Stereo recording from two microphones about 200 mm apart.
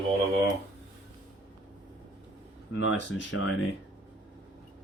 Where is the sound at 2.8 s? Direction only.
65° left (ahead or behind).